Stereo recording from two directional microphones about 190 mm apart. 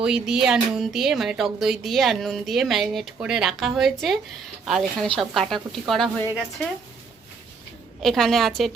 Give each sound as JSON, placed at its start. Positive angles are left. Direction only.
{"t": 0.0, "sound": "speech", "side_deg": -5}
{"t": 8.0, "sound": "speech", "side_deg": 0}